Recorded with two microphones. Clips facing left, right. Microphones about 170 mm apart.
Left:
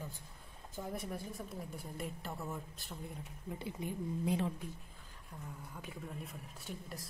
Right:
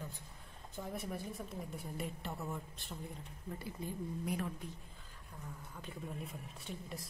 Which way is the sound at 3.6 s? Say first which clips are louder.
Left 2 dB; 20° left (ahead or behind).